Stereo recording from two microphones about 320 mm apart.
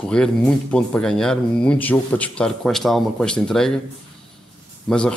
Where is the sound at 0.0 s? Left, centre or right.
Centre.